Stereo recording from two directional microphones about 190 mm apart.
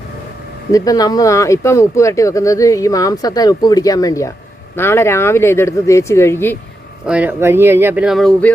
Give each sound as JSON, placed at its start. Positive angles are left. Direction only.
{"t": 0.7, "sound": "speech", "side_deg": 20}
{"t": 7.1, "sound": "speech", "side_deg": -10}